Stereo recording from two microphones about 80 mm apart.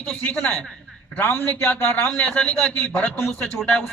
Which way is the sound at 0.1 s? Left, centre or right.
Centre.